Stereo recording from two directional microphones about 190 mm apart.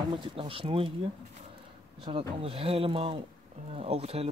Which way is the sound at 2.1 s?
30° right (ahead or behind).